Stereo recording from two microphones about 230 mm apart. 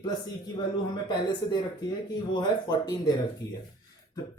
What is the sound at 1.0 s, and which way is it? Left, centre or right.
A man's voice, centre.